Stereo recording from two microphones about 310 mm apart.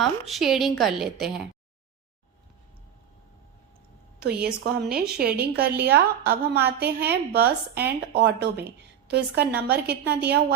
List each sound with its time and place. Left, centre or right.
0.0 s a woman's voice: centre
4.2 s a woman's voice: right